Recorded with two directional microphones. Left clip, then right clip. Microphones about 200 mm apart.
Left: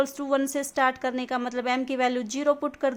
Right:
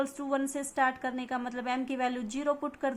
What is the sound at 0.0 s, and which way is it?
A woman's voice, 30° left (ahead or behind).